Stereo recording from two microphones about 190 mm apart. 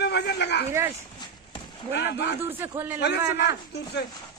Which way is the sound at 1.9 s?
65° left (ahead or behind).